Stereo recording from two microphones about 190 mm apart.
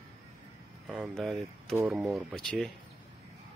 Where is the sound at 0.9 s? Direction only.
5° right (ahead or behind).